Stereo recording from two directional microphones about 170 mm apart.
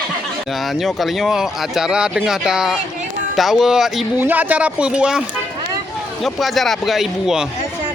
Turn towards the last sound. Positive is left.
turn(degrees=0)  # may be behind; listen again after turning